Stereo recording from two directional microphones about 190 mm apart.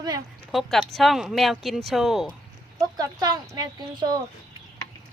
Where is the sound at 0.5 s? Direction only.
Centre (ahead or behind).